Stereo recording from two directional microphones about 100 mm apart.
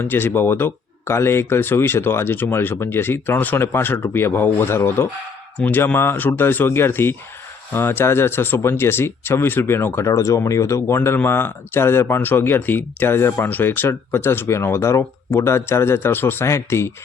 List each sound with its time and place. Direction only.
0.0 s speech: 20° left (ahead or behind)